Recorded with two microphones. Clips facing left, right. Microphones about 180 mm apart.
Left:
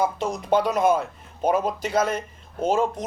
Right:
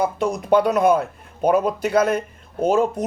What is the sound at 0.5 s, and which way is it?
Speech, 55° right (ahead or behind).